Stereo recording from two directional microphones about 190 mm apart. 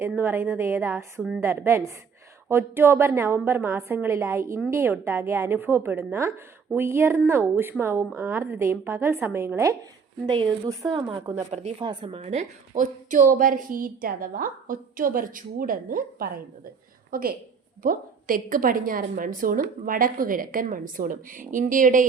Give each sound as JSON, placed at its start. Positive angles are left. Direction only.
{"t": 0.0, "sound": "a woman's voice", "side_deg": -10}
{"t": 10.2, "sound": "a woman's voice", "side_deg": -25}
{"t": 11.5, "sound": "a woman's voice", "side_deg": -30}